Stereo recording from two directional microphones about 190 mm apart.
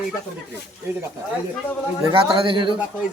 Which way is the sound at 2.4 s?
25° right (ahead or behind).